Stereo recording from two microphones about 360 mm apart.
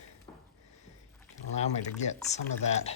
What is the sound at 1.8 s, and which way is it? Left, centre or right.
Speech, centre.